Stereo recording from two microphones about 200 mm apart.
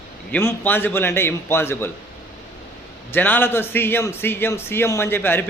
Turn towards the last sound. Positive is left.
turn(degrees=10)  # may be behind; listen again after turning